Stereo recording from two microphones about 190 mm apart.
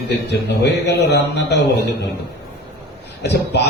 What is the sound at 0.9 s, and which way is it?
Speech, 60° left (ahead or behind).